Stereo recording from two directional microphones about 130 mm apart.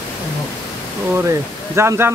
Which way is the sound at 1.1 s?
20° right (ahead or behind).